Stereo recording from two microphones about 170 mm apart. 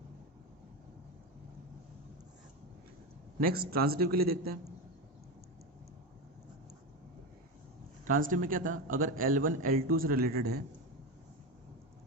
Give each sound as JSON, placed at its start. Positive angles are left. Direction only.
{"t": 3.4, "sound": "a man's voice", "side_deg": -65}
{"t": 8.0, "sound": "a man's voice", "side_deg": -50}